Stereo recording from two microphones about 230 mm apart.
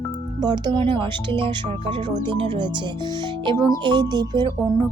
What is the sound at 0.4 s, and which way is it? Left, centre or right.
Speech, centre.